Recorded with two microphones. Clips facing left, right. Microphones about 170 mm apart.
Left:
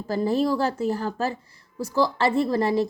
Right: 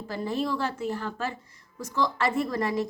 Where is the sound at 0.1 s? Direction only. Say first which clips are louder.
Left 7 dB; 35° left (ahead or behind).